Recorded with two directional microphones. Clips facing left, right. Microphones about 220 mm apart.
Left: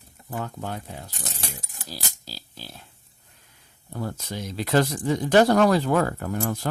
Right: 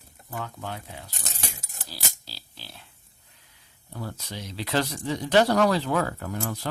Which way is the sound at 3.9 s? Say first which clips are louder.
Left 5 dB; 45° left (ahead or behind).